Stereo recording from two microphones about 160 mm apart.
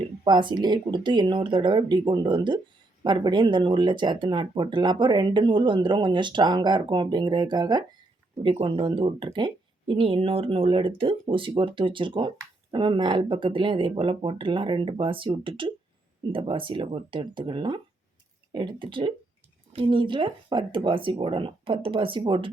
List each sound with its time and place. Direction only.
0.3 s speech: 30° right (ahead or behind)